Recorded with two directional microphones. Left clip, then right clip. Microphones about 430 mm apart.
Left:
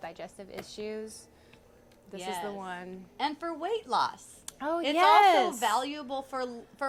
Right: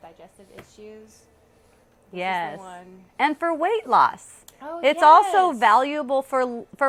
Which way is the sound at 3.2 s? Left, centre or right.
Right.